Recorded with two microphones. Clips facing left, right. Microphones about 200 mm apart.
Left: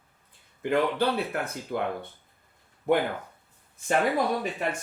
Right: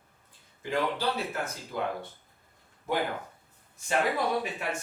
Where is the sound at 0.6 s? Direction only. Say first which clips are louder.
Left 5 dB; 60° left (ahead or behind).